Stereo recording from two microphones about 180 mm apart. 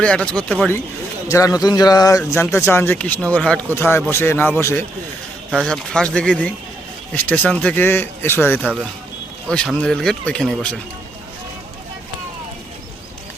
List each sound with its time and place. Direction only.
0.0 s speech: 5° left (ahead or behind)
1.3 s speech: 15° left (ahead or behind)